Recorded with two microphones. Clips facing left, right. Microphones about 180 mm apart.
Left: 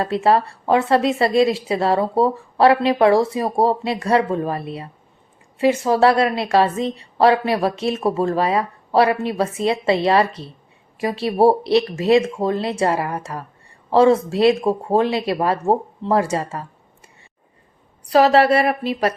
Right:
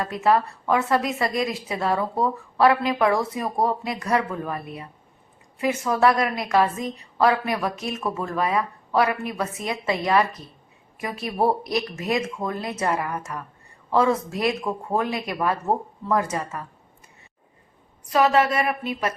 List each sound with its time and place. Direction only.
0.0 s a woman's voice: 30° left (ahead or behind)
18.3 s speech: 35° left (ahead or behind)